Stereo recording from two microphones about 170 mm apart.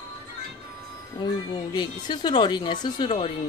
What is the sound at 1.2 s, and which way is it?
Speech, 25° left (ahead or behind).